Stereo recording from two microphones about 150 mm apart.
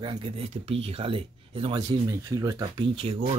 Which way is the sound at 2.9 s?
40° right (ahead or behind).